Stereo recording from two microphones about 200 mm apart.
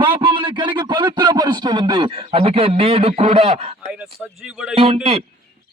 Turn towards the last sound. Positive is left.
turn(degrees=-30)  # may be behind; listen again after turning